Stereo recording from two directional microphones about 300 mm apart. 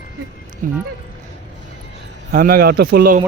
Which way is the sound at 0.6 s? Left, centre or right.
Right.